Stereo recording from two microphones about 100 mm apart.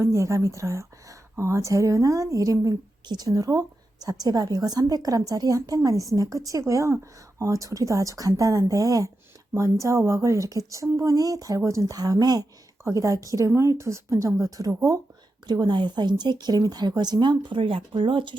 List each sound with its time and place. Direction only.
0.0 s speech: 30° right (ahead or behind); by 18.3 s 55° right (ahead or behind)